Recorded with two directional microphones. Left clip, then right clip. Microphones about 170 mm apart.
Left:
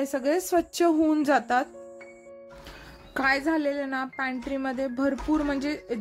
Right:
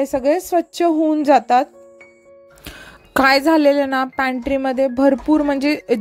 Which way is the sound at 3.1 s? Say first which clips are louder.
Right 11 dB; 55° right (ahead or behind).